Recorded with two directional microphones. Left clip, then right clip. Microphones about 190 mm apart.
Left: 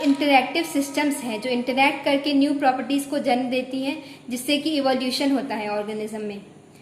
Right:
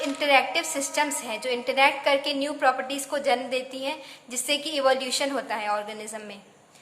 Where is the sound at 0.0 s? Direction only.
20° right (ahead or behind).